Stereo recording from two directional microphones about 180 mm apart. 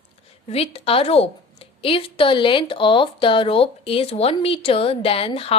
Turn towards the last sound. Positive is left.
turn(degrees=30)  # may be behind; listen again after turning